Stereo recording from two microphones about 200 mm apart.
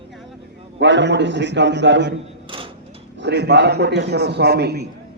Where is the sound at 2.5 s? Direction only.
25° right (ahead or behind).